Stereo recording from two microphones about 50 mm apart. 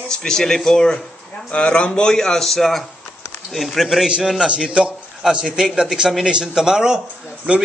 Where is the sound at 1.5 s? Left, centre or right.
Left; by 4.5 s centre.